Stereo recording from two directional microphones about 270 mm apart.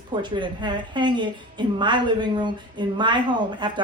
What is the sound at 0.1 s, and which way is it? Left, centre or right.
Speech, centre.